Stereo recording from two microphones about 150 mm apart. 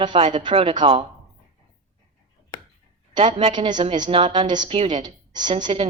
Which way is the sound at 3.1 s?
35° right (ahead or behind).